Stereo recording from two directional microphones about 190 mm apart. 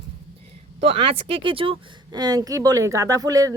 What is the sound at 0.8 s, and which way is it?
A woman's voice, 30° right (ahead or behind).